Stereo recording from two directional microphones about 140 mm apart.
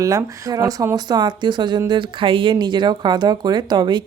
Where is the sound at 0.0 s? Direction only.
25° right (ahead or behind).